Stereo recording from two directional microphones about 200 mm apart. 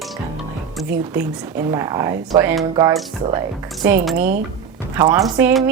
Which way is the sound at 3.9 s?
10° right (ahead or behind).